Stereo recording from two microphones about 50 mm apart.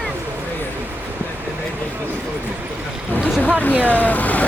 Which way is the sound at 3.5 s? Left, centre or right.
Left.